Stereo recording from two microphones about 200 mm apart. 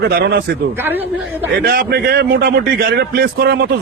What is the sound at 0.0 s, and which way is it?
Speech, 50° right (ahead or behind).